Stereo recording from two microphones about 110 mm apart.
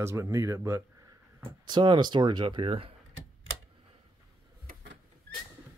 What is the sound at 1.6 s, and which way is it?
Speech, 45° right (ahead or behind).